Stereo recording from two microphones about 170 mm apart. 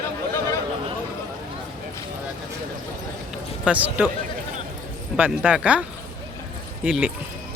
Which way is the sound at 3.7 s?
10° right (ahead or behind).